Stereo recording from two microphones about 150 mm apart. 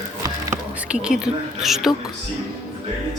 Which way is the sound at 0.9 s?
5° right (ahead or behind).